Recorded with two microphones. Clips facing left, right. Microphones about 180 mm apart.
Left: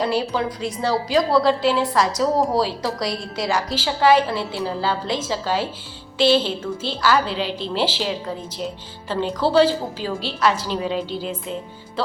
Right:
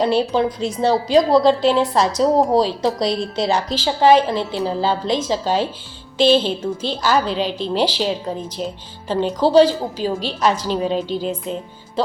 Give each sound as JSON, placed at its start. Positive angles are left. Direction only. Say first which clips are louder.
{"t": 0.0, "sound": "a woman's voice", "louder": "right 5 dB", "side_deg": -25}